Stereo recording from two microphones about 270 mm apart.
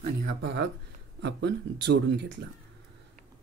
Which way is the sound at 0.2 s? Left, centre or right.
Right.